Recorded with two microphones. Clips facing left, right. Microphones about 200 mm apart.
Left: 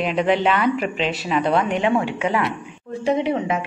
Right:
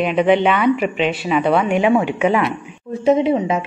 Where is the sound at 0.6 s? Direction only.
5° right (ahead or behind); by 3.5 s 25° right (ahead or behind).